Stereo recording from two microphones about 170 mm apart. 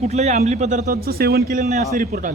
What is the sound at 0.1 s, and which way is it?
A man's voice, 40° right (ahead or behind).